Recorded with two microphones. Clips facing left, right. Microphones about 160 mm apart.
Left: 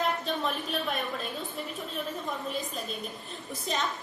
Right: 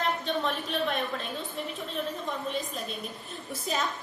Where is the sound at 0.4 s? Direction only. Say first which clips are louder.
Right 2 dB; centre (ahead or behind).